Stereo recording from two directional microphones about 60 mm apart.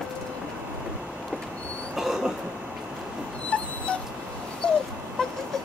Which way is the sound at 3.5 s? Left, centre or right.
Left.